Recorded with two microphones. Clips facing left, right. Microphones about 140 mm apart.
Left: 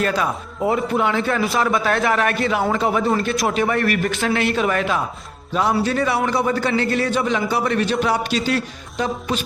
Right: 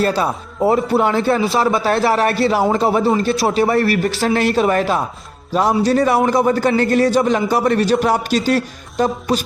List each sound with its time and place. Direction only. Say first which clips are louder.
0.0 s a man's voice: right 3 dB; 35° right (ahead or behind)